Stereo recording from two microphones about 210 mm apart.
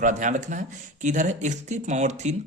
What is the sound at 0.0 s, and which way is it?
Speech, 35° right (ahead or behind).